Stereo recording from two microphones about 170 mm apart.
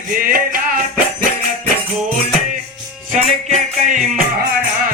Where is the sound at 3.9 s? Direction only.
50° right (ahead or behind).